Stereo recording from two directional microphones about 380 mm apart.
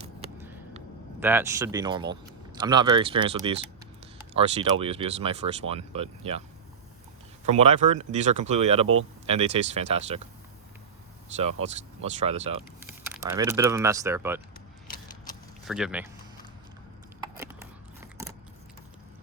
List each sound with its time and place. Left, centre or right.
1.2 s speech: centre
7.4 s speech: centre
12.2 s speech: centre
15.6 s speech: centre
17.3 s scissors: centre